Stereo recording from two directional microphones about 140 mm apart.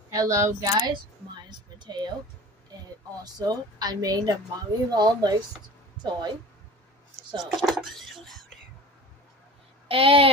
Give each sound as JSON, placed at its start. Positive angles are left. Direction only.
{"t": 0.1, "sound": "a woman's voice", "side_deg": -25}
{"t": 1.5, "sound": "a sound", "side_deg": -30}
{"t": 3.3, "sound": "a woman's voice", "side_deg": -30}
{"t": 7.4, "sound": "speech", "side_deg": 0}
{"t": 9.8, "sound": "speech", "side_deg": -40}